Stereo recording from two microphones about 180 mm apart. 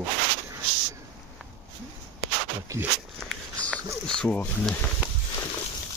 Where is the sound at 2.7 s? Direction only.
15° right (ahead or behind).